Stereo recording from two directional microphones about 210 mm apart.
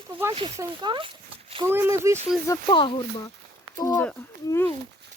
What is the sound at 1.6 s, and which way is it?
Speech, 10° right (ahead or behind).